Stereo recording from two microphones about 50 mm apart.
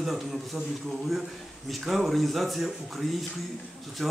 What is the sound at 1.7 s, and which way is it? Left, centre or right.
Speech, centre.